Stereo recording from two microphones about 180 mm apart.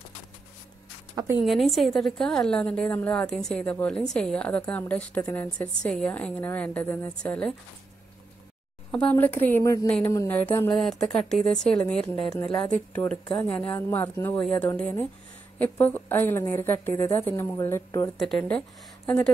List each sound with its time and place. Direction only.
1.1 s speech: 15° right (ahead or behind)
1.4 s a woman's voice: centre (ahead or behind)
8.9 s a woman's voice: 10° left (ahead or behind)
9.8 s a woman's voice: 5° left (ahead or behind)
18.1 s a woman's voice: centre (ahead or behind)